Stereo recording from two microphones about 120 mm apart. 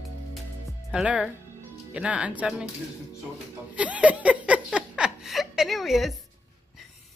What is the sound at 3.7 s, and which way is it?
Laughter, 10° right (ahead or behind).